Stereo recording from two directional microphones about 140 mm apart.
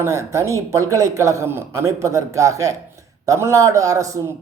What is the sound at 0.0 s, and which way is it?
A woman's voice, 20° right (ahead or behind).